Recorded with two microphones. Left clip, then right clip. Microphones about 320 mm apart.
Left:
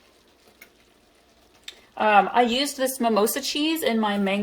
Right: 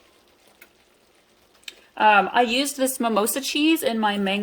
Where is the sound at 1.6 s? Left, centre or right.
Right.